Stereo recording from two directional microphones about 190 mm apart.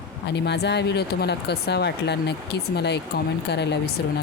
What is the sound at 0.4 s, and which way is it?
Speech, 60° left (ahead or behind).